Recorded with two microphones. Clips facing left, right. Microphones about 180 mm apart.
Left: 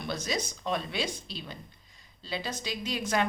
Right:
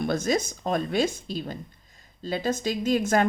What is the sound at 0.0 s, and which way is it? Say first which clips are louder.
Speech: right 8 dB; 50° right (ahead or behind).